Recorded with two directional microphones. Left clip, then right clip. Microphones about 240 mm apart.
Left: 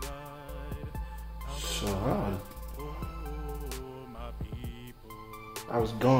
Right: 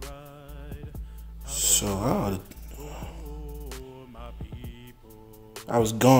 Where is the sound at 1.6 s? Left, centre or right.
Right.